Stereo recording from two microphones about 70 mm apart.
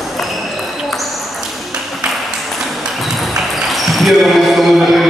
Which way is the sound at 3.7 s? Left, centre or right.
Centre.